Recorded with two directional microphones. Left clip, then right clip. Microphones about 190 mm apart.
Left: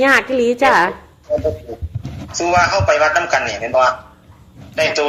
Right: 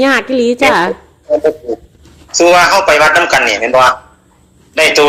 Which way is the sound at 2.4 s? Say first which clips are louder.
Right 8 dB; 45° right (ahead or behind).